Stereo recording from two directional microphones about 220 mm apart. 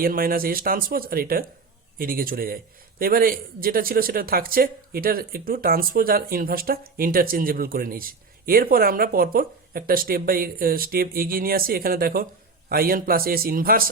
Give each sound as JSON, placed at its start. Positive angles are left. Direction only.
{"t": 0.0, "sound": "a man's voice", "side_deg": -40}